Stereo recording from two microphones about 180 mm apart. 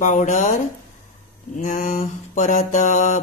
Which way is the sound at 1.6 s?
45° left (ahead or behind).